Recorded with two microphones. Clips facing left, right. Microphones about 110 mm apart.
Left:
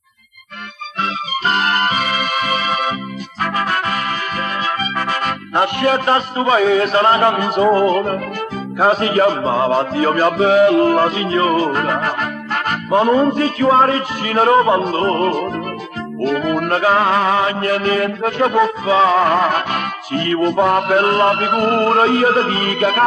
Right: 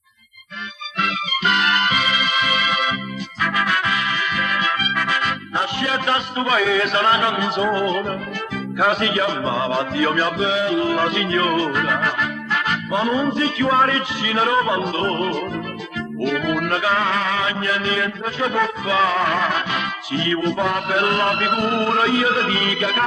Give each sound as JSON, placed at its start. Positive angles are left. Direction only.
{"t": 1.0, "sound": "music", "side_deg": 40}
{"t": 8.8, "sound": "a man's voice", "side_deg": 35}
{"t": 16.2, "sound": "music", "side_deg": 40}
{"t": 18.9, "sound": "a man's voice", "side_deg": 35}